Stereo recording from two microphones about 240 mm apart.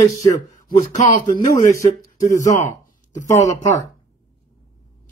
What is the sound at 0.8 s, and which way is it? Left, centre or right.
Speech, left.